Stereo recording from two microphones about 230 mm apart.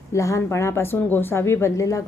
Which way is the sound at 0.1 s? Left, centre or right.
Centre.